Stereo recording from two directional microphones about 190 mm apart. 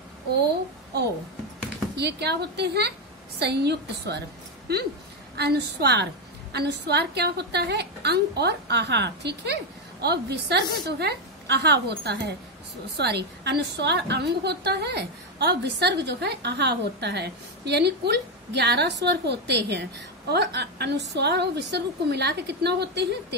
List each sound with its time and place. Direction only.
2.0 s a woman's voice: 60° right (ahead or behind)
5.4 s a woman's voice: 60° right (ahead or behind)